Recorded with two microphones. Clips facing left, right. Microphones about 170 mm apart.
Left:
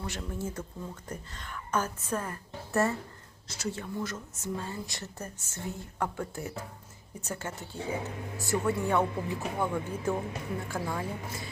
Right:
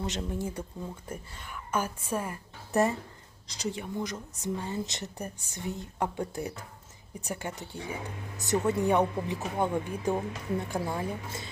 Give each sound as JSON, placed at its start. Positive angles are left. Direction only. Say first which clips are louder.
{"t": 0.0, "sound": "a woman's voice", "louder": "right 3 dB", "side_deg": -20}